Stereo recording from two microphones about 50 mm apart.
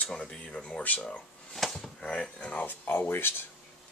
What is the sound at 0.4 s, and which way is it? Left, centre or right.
Speech, left.